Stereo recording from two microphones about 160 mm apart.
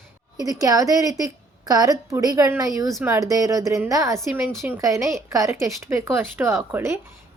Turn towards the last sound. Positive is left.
turn(degrees=-15)  # may be behind; listen again after turning